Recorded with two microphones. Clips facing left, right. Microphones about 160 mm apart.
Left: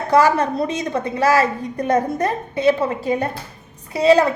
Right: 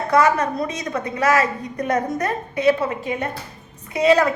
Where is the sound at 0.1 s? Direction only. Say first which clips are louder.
Left 2 dB; 30° left (ahead or behind).